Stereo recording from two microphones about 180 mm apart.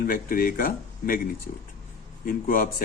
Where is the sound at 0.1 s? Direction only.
50° left (ahead or behind).